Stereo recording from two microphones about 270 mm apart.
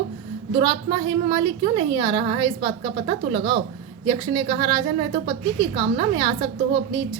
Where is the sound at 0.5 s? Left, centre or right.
Centre.